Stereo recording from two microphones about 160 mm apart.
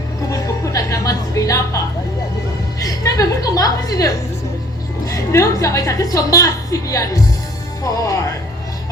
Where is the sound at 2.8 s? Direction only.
20° left (ahead or behind).